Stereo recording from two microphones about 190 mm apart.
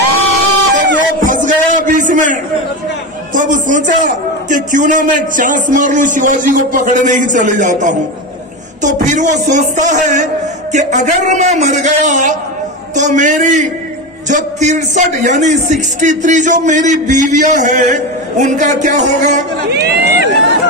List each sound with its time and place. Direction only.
0.7 s a sound: 40° right (ahead or behind)
3.3 s a man's voice: 40° right (ahead or behind)
19.7 s speech: 60° right (ahead or behind)